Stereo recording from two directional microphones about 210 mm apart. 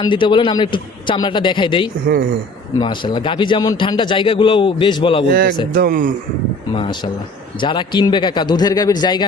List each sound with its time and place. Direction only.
0.0 s a man's voice: 25° left (ahead or behind)
5.3 s a man's voice: 45° right (ahead or behind)
6.7 s a man's voice: 20° left (ahead or behind)